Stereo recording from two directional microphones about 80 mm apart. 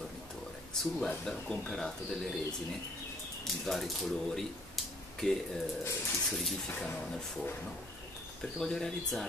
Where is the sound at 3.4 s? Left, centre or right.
Centre.